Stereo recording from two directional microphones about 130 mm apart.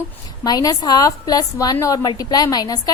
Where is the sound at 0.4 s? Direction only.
30° left (ahead or behind).